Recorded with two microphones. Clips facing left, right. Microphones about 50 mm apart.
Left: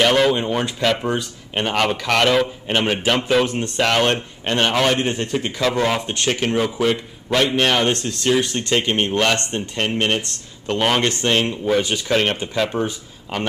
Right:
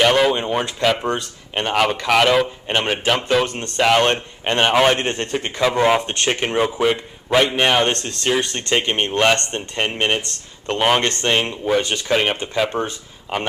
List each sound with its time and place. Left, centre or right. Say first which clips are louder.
0.0 s speech: even; centre
3.8 s speech: right 3 dB; centre
4.6 s a man's voice: right 3 dB; centre
4.9 s a man's voice: left 1 dB; right
5.4 s speech: right 4 dB; centre